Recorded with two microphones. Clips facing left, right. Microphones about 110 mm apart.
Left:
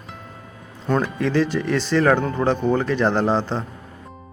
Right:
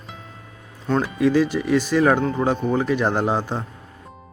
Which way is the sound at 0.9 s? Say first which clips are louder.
Right 2 dB; 5° right (ahead or behind).